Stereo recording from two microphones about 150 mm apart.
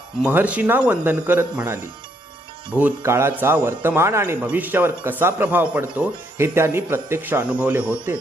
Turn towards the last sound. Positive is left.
turn(degrees=-10)  # may be behind; listen again after turning